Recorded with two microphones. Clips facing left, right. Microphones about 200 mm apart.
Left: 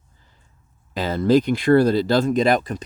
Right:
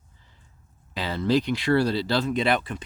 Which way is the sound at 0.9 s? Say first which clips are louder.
Left 6 dB; 45° left (ahead or behind).